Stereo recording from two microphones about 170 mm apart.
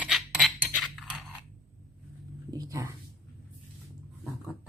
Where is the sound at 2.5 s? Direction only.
20° right (ahead or behind).